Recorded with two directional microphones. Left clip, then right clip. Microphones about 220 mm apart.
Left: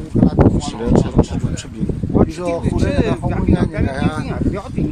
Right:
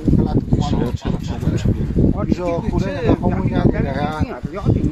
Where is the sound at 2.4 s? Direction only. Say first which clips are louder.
Left 2 dB; 45° left (ahead or behind).